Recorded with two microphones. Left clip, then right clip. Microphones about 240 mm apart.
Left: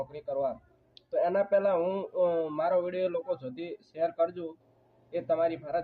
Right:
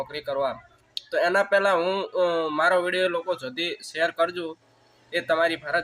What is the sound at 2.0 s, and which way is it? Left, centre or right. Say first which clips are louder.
Speech: right 4 dB; right.